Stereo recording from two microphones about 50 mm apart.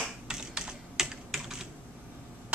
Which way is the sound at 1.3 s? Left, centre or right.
Centre.